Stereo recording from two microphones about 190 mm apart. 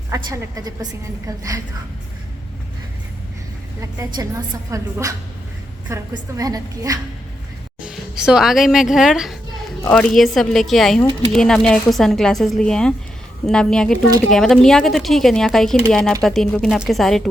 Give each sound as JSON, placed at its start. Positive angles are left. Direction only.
{"t": 0.1, "sound": "a woman's voice", "side_deg": -20}
{"t": 3.8, "sound": "a woman's voice", "side_deg": -20}
{"t": 7.8, "sound": "a woman's voice", "side_deg": -5}